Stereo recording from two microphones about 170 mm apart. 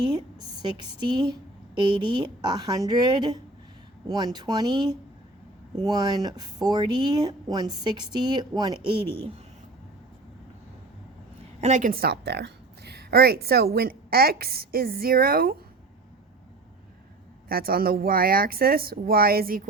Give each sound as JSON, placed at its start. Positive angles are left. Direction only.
{"t": 0.0, "sound": "a woman's voice", "side_deg": -25}
{"t": 11.6, "sound": "a woman's voice", "side_deg": -45}
{"t": 17.5, "sound": "speech", "side_deg": -60}